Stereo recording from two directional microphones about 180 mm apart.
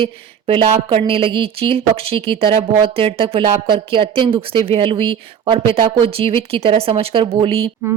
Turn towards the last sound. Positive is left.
turn(degrees=-30)  # may be behind; listen again after turning